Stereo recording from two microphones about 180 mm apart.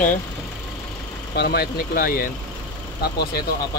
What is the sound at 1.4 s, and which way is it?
Speech, 60° left (ahead or behind).